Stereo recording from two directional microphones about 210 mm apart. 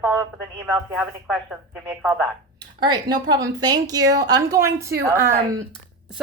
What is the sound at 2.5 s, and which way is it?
A woman's voice, 20° right (ahead or behind).